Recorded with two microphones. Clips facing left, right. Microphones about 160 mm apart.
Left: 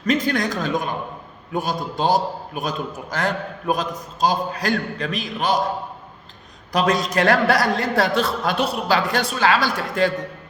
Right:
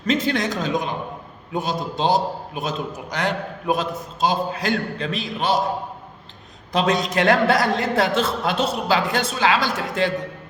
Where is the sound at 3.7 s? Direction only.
40° left (ahead or behind).